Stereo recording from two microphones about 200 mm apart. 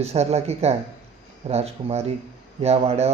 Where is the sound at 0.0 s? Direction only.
30° right (ahead or behind).